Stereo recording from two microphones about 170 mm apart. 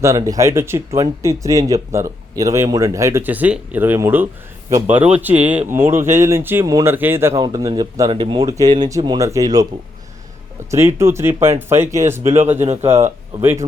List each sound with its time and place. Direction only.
0.0 s speech: 20° right (ahead or behind)
10.7 s speech: 15° right (ahead or behind)